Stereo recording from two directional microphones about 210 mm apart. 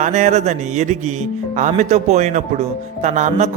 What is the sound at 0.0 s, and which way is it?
Speech, 35° right (ahead or behind).